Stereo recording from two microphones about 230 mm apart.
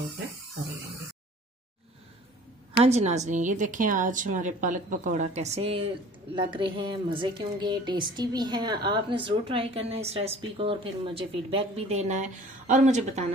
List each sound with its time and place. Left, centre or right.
2.8 s a woman's voice: right